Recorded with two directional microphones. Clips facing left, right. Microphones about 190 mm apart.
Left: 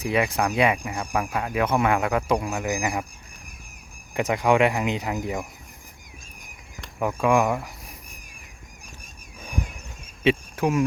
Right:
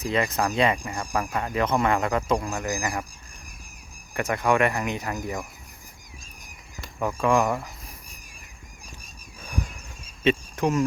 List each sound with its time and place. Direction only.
0.0 s speech: 10° left (ahead or behind)
4.1 s speech: 15° left (ahead or behind)
7.0 s speech: 10° left (ahead or behind)
10.2 s speech: 10° left (ahead or behind)